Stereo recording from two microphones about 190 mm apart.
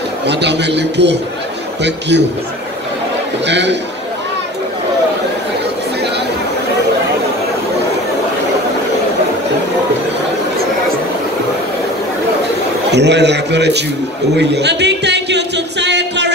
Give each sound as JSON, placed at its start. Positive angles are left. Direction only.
{"t": 0.3, "sound": "a man's voice", "side_deg": -65}
{"t": 3.4, "sound": "speech", "side_deg": -65}
{"t": 12.9, "sound": "a man's voice", "side_deg": -65}